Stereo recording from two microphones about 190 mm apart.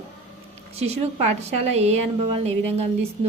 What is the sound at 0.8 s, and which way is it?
A woman's voice, 35° right (ahead or behind).